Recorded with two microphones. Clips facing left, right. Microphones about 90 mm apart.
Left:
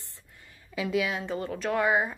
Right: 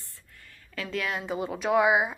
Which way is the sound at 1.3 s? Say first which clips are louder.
Right 6 dB; 15° right (ahead or behind).